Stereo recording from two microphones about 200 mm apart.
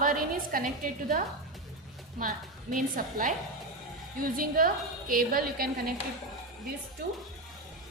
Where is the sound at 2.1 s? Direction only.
45° right (ahead or behind).